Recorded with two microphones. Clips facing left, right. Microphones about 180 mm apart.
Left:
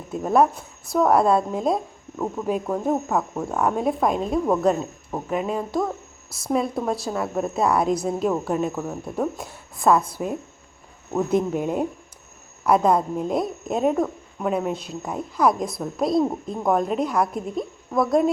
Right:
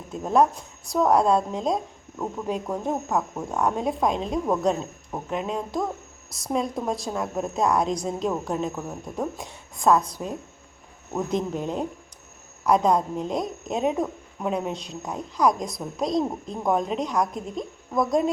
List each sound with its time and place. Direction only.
0.1 s a woman's voice: 5° left (ahead or behind)